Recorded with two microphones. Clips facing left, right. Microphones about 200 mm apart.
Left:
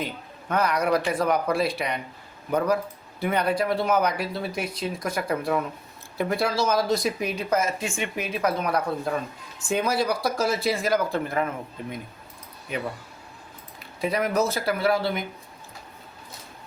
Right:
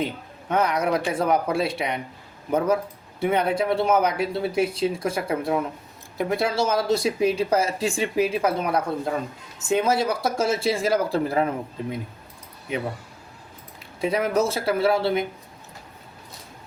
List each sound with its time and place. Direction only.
0.0 s speech: 25° right (ahead or behind)
3.2 s speech: 25° right (ahead or behind)
14.0 s speech: 25° right (ahead or behind)